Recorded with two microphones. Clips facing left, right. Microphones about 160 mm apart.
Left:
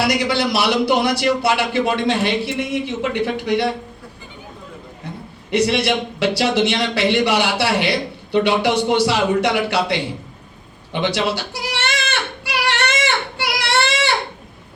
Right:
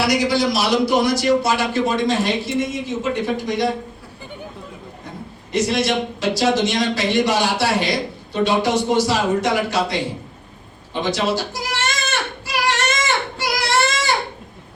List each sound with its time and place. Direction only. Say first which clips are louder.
0.2 s a man's voice: even; 60° left (ahead or behind)
5.5 s speech: left 2 dB; 65° left (ahead or behind)
11.0 s speech: even; 65° left (ahead or behind)
12.5 s a sound: even; 65° left (ahead or behind)